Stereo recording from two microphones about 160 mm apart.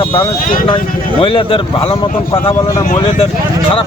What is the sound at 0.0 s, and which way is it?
Speech, 35° left (ahead or behind).